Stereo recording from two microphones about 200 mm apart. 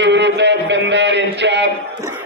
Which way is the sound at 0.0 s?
60° right (ahead or behind).